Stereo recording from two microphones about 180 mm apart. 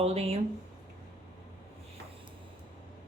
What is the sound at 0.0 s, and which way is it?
Speech, 35° right (ahead or behind).